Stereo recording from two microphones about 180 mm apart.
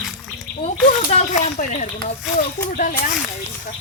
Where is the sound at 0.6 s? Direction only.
40° left (ahead or behind).